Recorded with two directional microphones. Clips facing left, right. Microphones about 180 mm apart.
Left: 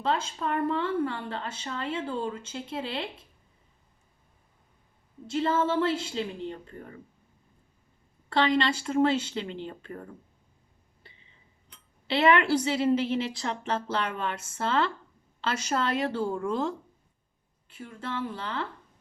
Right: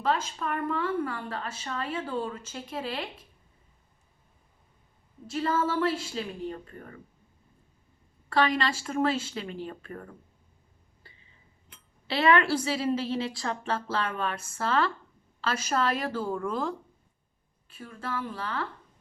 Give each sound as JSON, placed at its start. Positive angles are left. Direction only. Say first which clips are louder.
{"t": 0.0, "sound": "speech", "louder": "even", "side_deg": 25}
{"t": 5.2, "sound": "speech", "louder": "left 2 dB", "side_deg": 25}
{"t": 8.3, "sound": "speech", "louder": "left 1 dB", "side_deg": 25}
{"t": 12.0, "sound": "speech", "louder": "left 1 dB", "side_deg": 25}